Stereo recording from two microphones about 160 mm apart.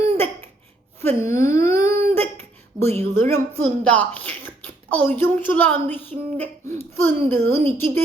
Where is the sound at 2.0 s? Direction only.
40° right (ahead or behind).